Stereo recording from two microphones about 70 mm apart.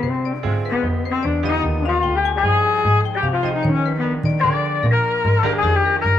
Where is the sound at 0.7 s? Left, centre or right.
Centre.